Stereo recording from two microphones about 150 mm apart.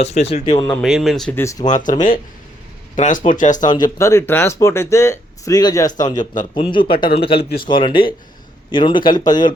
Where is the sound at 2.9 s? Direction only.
55° left (ahead or behind).